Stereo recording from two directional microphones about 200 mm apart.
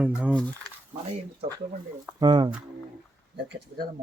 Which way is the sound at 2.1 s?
20° right (ahead or behind).